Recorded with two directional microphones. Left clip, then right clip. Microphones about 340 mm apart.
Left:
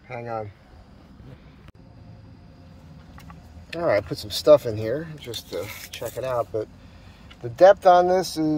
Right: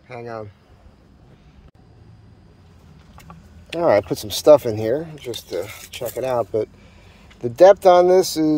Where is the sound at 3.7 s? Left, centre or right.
Right.